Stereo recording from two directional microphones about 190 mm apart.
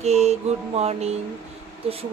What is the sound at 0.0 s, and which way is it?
Speech, 35° right (ahead or behind).